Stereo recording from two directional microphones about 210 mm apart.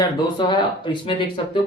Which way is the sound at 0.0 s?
20° left (ahead or behind).